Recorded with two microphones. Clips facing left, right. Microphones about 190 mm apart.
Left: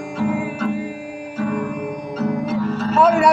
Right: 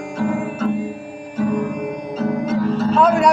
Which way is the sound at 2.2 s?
Centre (ahead or behind).